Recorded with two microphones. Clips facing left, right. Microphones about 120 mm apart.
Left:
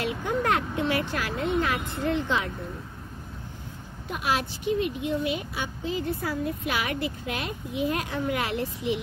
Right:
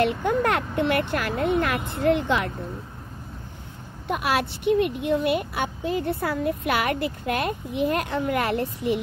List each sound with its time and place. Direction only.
0.2 s speech: 55° right (ahead or behind)
4.1 s speech: 60° right (ahead or behind)